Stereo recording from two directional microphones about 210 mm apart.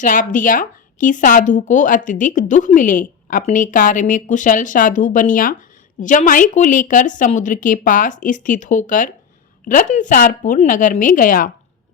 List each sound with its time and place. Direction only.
0.0 s speech: 40° left (ahead or behind)